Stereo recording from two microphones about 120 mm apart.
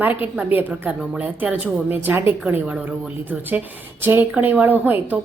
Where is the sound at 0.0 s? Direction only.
15° right (ahead or behind).